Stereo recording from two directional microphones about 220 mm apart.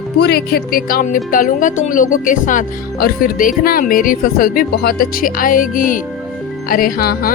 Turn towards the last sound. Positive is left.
turn(degrees=45)  # may be behind; listen again after turning